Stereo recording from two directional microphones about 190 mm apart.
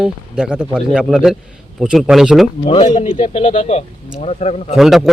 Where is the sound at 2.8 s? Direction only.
40° left (ahead or behind).